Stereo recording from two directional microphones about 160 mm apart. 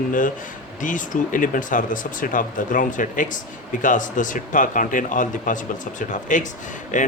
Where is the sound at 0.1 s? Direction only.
55° left (ahead or behind).